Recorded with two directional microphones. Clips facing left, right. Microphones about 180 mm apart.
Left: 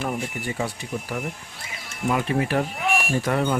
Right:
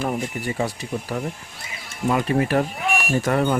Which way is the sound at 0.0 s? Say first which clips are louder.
Right 3 dB; 40° right (ahead or behind).